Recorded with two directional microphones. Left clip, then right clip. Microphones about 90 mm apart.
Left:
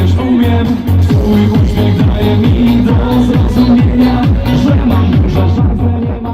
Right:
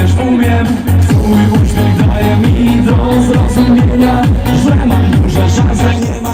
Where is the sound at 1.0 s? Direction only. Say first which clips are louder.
Even; 25° left (ahead or behind).